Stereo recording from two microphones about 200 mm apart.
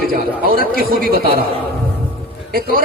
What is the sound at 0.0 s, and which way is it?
A man's voice, 45° right (ahead or behind).